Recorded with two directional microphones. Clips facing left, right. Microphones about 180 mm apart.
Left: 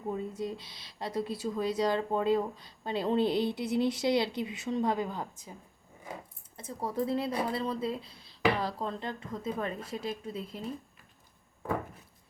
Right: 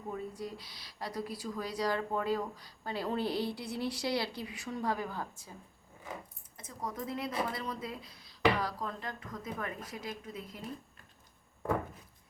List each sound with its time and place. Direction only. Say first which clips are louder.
0.1 s speech: left 5 dB; 25° left (ahead or behind)
6.6 s speech: left 7 dB; 30° left (ahead or behind)